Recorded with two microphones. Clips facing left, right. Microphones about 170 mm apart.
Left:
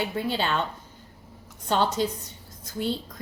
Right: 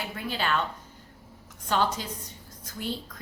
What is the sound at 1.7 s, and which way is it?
Speech, 25° left (ahead or behind).